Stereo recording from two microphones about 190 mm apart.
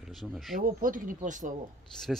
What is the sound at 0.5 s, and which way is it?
Speech, 45° right (ahead or behind).